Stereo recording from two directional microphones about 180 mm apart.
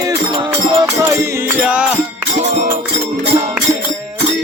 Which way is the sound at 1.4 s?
5° right (ahead or behind).